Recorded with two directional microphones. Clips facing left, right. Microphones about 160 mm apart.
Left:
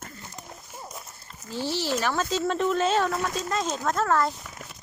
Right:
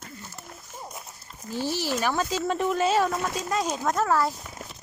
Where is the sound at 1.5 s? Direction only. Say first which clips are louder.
Even; 15° right (ahead or behind).